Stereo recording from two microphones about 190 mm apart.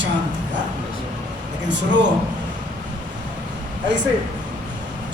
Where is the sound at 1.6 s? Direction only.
70° right (ahead or behind).